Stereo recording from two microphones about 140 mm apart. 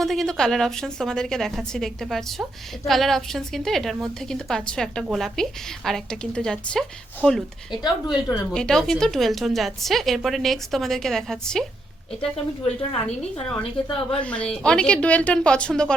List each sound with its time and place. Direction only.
0.0 s a woman's voice: centre (ahead or behind)
7.7 s speech: 30° left (ahead or behind)
8.5 s a woman's voice: 5° left (ahead or behind)
12.2 s speech: 45° left (ahead or behind)
14.2 s a woman's voice: 10° left (ahead or behind)